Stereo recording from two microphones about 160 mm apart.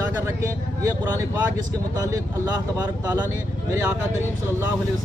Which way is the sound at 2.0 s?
20° right (ahead or behind).